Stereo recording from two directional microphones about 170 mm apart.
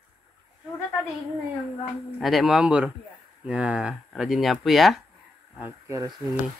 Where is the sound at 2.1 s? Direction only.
Centre (ahead or behind).